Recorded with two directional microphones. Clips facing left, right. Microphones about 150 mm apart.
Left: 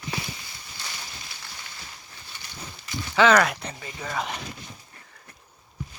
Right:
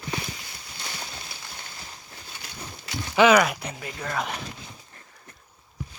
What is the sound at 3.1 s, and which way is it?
Speech, 10° right (ahead or behind).